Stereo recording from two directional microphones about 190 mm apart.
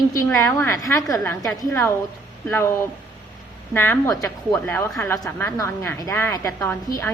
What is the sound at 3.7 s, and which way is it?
A woman's voice, 10° left (ahead or behind).